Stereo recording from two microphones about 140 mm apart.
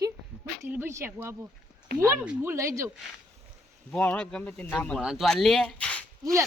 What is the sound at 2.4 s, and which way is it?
Speech, 20° right (ahead or behind).